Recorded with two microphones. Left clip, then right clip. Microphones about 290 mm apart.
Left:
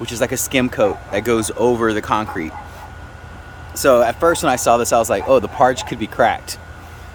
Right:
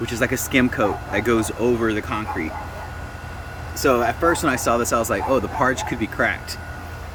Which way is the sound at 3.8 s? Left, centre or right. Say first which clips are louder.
Left 5 dB; centre.